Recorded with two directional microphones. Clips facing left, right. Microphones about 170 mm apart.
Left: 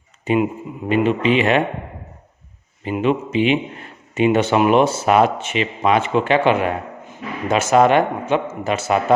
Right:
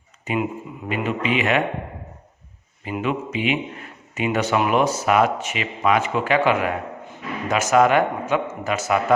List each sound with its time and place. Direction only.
0.3 s speech: 30° left (ahead or behind)
2.8 s speech: 25° left (ahead or behind)